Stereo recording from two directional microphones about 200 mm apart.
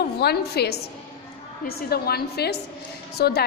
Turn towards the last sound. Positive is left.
turn(degrees=50)  # may be behind; listen again after turning